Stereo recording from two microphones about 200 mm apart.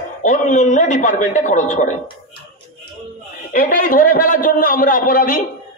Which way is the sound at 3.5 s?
40° left (ahead or behind).